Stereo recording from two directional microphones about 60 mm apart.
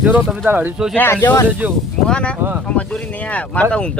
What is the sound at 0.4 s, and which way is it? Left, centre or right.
Speech, right.